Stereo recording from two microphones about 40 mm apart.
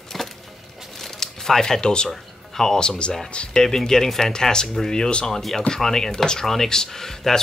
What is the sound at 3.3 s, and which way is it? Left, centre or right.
Speech, left.